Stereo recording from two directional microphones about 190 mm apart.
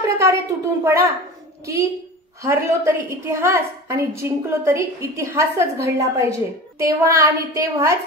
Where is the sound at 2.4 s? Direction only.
15° right (ahead or behind).